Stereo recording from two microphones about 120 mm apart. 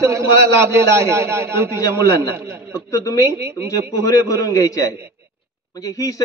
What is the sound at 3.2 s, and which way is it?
Speech, 25° right (ahead or behind).